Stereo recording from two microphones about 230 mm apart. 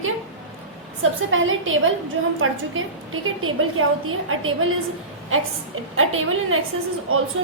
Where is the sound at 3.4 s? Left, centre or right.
Right.